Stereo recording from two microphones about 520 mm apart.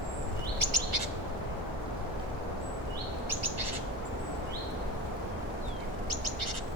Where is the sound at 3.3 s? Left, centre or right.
Right.